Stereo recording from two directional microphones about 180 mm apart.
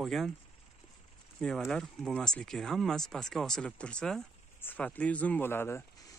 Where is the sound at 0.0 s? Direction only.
Centre (ahead or behind).